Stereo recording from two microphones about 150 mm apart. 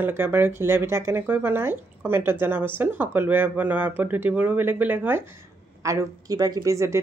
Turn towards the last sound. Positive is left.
turn(degrees=-20)  # may be behind; listen again after turning